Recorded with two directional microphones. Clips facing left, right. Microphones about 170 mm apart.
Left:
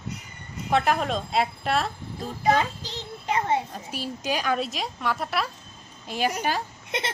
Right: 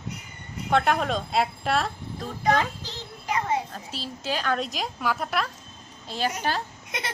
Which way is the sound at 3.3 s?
30° left (ahead or behind).